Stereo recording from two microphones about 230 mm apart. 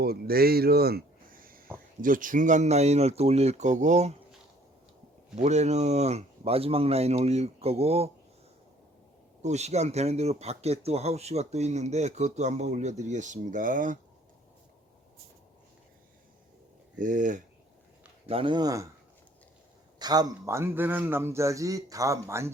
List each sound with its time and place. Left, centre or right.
0.0 s speech: right
5.4 s speech: right
9.4 s speech: right
17.0 s speech: right
18.3 s speech: right
20.0 s a man's voice: centre